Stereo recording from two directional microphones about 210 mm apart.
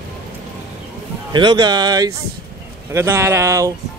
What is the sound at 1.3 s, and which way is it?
A man's voice, 20° right (ahead or behind).